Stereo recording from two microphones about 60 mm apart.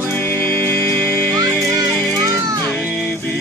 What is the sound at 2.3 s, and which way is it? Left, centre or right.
Music, right.